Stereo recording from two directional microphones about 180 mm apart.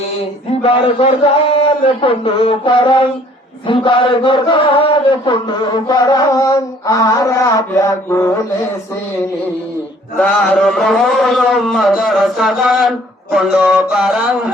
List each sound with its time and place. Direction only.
0.6 s a sound: 30° left (ahead or behind)
2.0 s chant: 30° left (ahead or behind)
10.2 s a man's voice: 5° left (ahead or behind)